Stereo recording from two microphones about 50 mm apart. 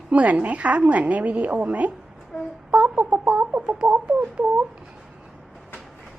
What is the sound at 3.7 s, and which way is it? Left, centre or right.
Speech, right.